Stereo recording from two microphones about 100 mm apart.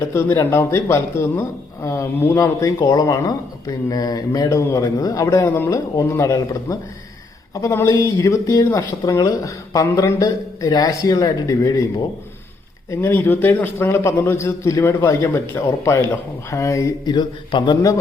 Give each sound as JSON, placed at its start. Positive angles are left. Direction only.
{"t": 0.1, "sound": "a man's voice", "side_deg": 25}
{"t": 12.9, "sound": "a man's voice", "side_deg": 25}
{"t": 17.2, "sound": "a man's voice", "side_deg": 50}